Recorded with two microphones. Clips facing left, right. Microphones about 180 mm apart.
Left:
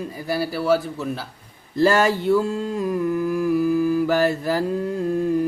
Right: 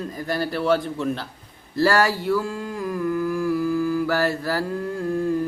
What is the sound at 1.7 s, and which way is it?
Mantra, 20° left (ahead or behind).